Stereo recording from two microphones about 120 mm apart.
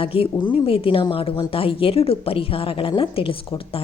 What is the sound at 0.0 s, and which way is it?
A woman's voice, 50° left (ahead or behind).